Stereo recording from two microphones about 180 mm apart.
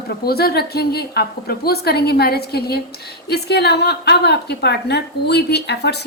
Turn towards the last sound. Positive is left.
turn(degrees=70)  # may be behind; listen again after turning